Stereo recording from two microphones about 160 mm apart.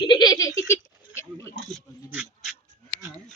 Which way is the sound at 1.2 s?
15° left (ahead or behind).